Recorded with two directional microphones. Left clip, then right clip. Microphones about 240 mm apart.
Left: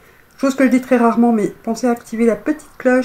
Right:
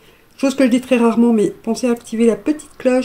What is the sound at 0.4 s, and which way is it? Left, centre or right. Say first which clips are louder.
Speech: even; right.